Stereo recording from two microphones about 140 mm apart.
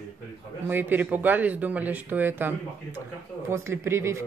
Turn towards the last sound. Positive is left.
turn(degrees=-20)  # may be behind; listen again after turning